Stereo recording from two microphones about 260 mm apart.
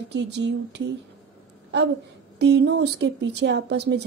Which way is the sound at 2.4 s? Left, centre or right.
Right.